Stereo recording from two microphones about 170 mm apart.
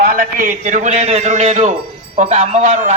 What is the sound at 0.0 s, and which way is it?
A man's voice, 55° right (ahead or behind).